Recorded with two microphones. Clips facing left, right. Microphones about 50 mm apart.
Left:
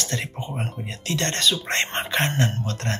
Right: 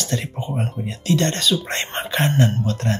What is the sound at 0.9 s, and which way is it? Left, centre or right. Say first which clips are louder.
Speech: right 7 dB; left.